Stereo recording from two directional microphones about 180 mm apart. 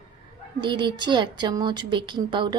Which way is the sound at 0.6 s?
25° right (ahead or behind).